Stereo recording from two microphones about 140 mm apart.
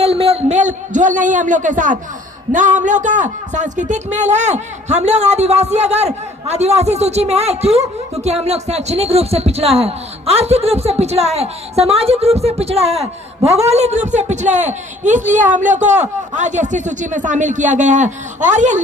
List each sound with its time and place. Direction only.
0.0 s a man's voice: 45° right (ahead or behind)